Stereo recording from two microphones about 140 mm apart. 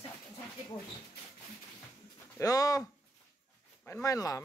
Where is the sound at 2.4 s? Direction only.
25° left (ahead or behind).